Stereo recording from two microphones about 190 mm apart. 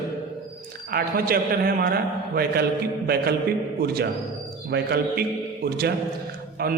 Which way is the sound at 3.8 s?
55° right (ahead or behind).